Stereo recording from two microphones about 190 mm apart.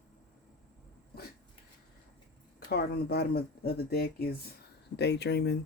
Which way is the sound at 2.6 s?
55° left (ahead or behind).